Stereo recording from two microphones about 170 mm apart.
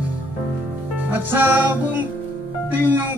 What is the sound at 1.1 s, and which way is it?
A man's voice, 10° right (ahead or behind).